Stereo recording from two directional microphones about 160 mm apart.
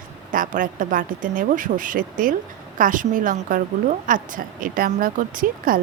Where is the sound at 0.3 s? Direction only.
55° right (ahead or behind).